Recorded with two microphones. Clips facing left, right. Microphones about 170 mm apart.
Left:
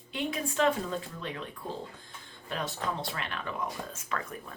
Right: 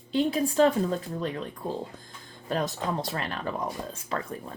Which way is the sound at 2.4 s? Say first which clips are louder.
Right 5 dB; 40° right (ahead or behind).